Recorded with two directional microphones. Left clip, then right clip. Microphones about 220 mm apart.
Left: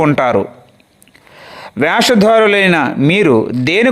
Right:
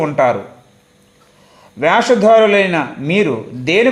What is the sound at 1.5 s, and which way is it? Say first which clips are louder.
A man's voice: right 1 dB; 40° left (ahead or behind).